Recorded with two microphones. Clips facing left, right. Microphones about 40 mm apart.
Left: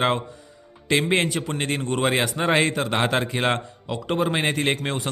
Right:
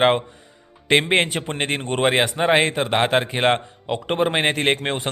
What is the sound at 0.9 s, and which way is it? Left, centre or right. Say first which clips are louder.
A man's voice: right 3 dB; right.